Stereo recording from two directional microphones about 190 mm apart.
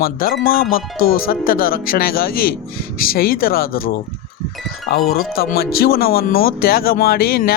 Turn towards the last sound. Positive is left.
turn(degrees=50)  # may be behind; listen again after turning